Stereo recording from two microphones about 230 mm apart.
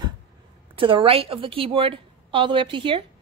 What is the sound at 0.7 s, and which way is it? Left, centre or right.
A woman's voice, right.